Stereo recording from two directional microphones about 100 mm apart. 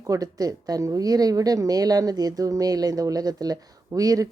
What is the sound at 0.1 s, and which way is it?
A woman's voice, 40° right (ahead or behind).